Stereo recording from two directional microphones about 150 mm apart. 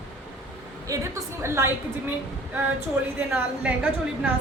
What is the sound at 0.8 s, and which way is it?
Speech, 20° right (ahead or behind).